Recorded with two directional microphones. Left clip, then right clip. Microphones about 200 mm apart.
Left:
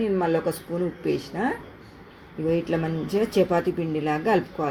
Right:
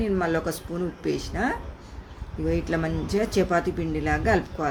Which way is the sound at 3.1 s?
5° left (ahead or behind).